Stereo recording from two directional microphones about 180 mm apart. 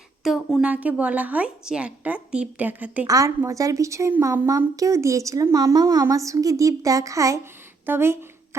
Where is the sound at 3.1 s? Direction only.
20° right (ahead or behind).